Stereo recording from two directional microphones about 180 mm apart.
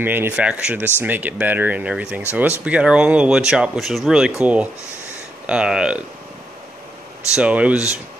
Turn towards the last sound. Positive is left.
turn(degrees=-5)  # may be behind; listen again after turning